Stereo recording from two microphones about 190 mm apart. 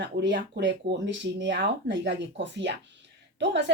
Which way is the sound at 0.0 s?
65° right (ahead or behind).